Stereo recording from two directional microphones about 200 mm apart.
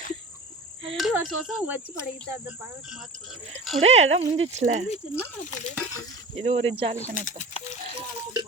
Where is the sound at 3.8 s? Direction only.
75° right (ahead or behind).